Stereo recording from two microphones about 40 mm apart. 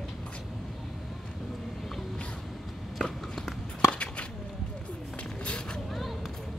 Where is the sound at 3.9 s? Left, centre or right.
Left.